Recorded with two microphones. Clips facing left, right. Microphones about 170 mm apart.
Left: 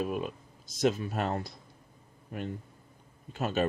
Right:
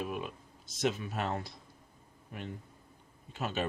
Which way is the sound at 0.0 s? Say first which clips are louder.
Left 5 dB; 40° left (ahead or behind).